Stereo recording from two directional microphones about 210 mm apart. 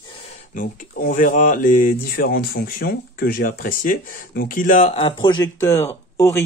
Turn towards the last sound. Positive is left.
turn(degrees=15)  # may be behind; listen again after turning